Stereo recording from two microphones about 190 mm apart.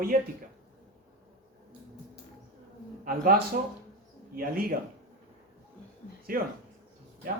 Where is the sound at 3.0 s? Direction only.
50° right (ahead or behind).